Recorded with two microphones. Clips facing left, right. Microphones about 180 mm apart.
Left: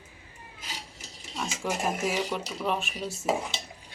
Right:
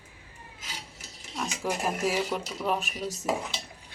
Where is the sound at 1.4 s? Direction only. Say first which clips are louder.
Even; centre (ahead or behind).